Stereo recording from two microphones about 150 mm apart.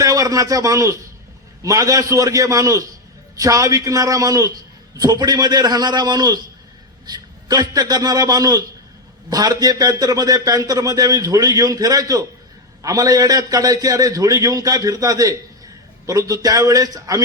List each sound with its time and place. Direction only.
0.0 s speech: 20° right (ahead or behind)